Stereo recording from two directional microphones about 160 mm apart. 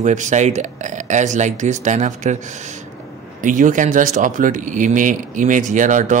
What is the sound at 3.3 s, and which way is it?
Speech, 55° right (ahead or behind).